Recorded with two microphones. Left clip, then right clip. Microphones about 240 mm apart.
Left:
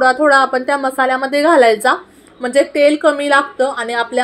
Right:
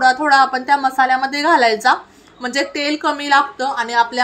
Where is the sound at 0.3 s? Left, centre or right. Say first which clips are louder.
Left 1 dB; right.